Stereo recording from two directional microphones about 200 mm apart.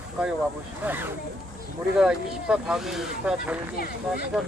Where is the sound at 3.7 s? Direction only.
50° left (ahead or behind).